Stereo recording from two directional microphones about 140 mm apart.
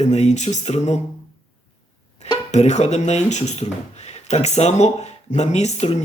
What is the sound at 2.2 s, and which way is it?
Speech, 50° left (ahead or behind).